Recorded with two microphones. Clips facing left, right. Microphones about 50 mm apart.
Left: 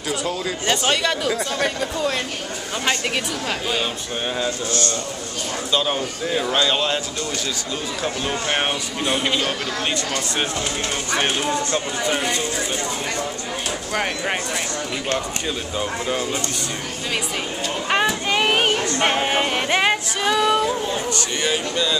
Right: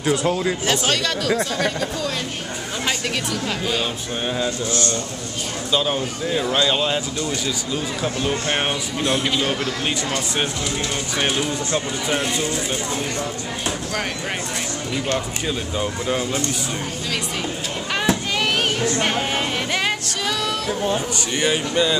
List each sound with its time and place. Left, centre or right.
0.7 s speech: centre
3.4 s speech: centre
8.0 s speech: centre
10.1 s speech: centre
11.7 s speech: centre
15.1 s speech: centre
17.9 s speech: left
21.1 s speech: centre